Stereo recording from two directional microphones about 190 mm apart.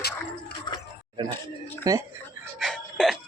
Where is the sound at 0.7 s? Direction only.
25° left (ahead or behind).